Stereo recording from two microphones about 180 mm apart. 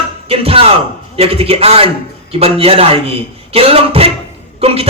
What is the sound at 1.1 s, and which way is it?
Music, 35° right (ahead or behind).